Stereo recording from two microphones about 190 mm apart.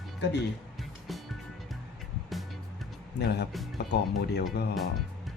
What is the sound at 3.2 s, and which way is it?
Speech, 60° left (ahead or behind).